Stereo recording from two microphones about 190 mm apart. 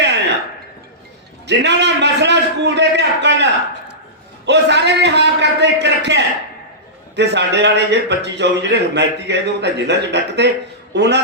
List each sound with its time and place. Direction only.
1.5 s a man's voice: 65° right (ahead or behind)